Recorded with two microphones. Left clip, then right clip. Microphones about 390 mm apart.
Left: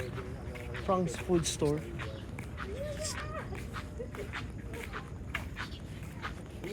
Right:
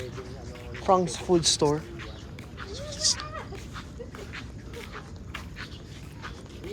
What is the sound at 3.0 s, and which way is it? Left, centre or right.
Speech, centre.